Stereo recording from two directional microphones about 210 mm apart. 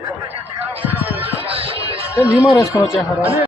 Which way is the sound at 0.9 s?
10° right (ahead or behind).